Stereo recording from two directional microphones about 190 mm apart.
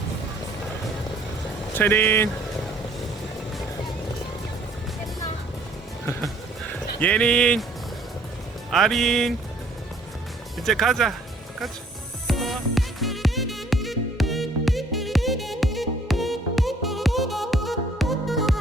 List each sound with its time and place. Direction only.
1.7 s speech: 10° left (ahead or behind)
7.0 s speech: 5° left (ahead or behind)
8.7 s speech: centre (ahead or behind)
10.7 s speech: centre (ahead or behind)
12.3 s music: centre (ahead or behind)